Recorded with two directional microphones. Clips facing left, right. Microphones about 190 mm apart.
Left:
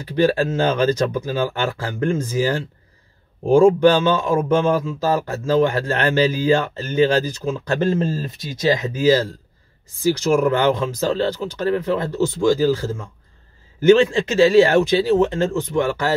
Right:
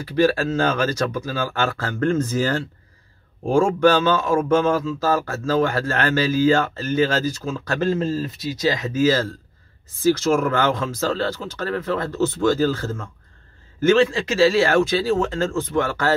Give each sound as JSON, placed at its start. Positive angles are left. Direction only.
{"t": 0.1, "sound": "speech", "side_deg": 20}
{"t": 14.1, "sound": "speech", "side_deg": 20}